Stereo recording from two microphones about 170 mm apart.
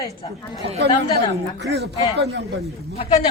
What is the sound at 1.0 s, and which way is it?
Speech, 75° right (ahead or behind).